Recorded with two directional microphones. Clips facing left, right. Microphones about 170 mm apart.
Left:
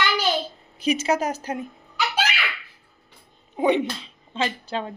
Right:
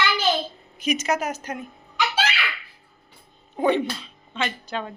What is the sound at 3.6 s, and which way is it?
Speech, 15° left (ahead or behind).